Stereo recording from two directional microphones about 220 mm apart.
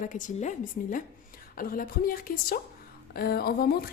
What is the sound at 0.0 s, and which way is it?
A woman's voice, 35° left (ahead or behind).